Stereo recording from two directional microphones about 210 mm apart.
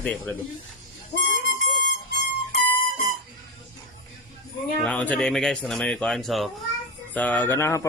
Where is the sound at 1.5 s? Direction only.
60° left (ahead or behind).